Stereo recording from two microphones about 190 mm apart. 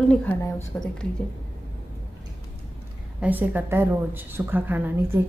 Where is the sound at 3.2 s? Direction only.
10° right (ahead or behind).